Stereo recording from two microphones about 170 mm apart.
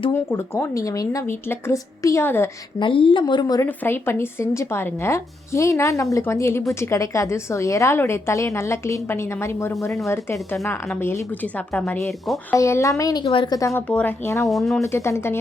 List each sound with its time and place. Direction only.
0.1 s a woman's voice: 15° left (ahead or behind)
2.7 s a woman's voice: 30° left (ahead or behind); by 11.2 s 15° left (ahead or behind)
11.7 s speech: centre (ahead or behind)
12.5 s speech: 15° left (ahead or behind)
13.2 s speech: 30° left (ahead or behind)
13.6 s a woman's voice: 20° left (ahead or behind)
14.4 s speech: centre (ahead or behind)
14.8 s a woman's voice: 15° left (ahead or behind)